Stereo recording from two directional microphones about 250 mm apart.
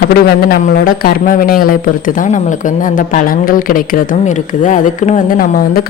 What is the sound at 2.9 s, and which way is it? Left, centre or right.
Speech, left.